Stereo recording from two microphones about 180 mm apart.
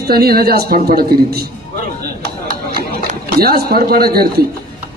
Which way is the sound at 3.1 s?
60° right (ahead or behind).